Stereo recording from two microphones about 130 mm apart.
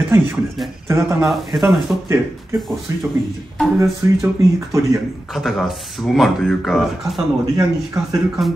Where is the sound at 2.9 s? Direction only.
25° right (ahead or behind).